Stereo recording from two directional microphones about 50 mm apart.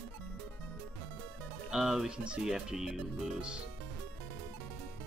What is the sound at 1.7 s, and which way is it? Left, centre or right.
Speech, centre.